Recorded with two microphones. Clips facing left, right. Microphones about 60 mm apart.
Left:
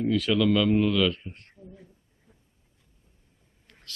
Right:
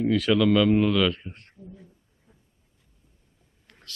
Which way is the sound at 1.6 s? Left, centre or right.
Left.